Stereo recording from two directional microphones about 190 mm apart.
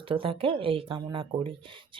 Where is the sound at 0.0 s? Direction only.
30° right (ahead or behind).